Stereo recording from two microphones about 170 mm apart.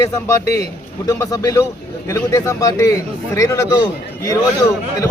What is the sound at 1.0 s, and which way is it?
A man's voice, 20° left (ahead or behind).